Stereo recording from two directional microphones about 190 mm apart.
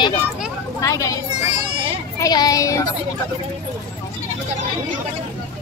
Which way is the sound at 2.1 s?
20° left (ahead or behind).